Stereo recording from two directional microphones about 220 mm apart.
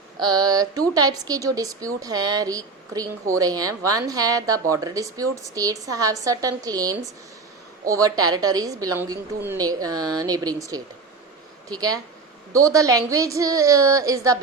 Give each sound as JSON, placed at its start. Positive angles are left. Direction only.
{"t": 0.2, "sound": "a woman's voice", "side_deg": -20}